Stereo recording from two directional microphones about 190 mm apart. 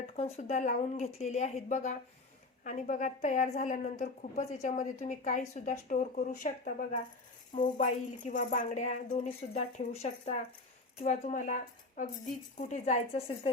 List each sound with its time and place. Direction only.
0.2 s a woman's voice: 35° left (ahead or behind)